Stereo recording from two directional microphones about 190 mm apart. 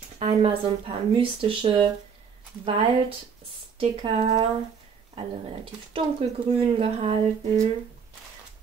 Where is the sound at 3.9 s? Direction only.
30° right (ahead or behind).